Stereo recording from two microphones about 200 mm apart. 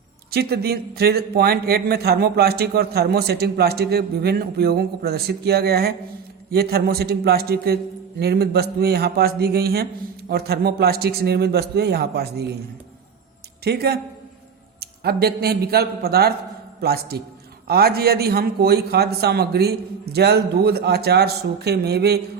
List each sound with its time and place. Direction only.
0.3 s speech: 50° right (ahead or behind)
13.7 s speech: 50° right (ahead or behind)